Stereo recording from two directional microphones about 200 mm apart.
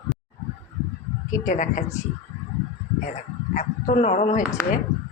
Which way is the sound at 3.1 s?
40° left (ahead or behind).